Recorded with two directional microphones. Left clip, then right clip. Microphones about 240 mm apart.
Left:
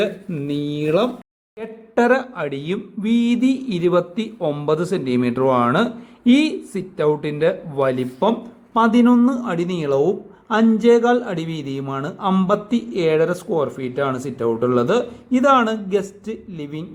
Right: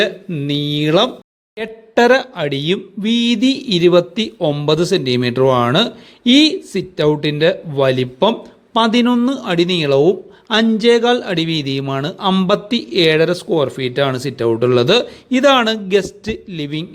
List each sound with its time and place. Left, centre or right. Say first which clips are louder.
0.0 s speech: right 4 dB; centre